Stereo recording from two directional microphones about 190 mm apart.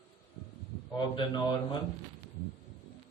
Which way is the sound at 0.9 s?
25° left (ahead or behind).